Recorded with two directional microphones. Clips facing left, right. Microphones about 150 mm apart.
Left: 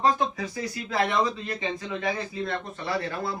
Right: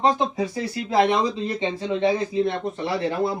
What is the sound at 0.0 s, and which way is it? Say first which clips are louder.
Speech: right 3 dB; 20° right (ahead or behind).